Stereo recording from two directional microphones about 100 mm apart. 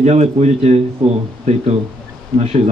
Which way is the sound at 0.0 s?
90° right.